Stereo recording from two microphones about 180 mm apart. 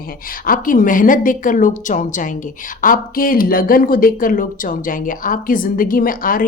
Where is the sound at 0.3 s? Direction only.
50° left (ahead or behind).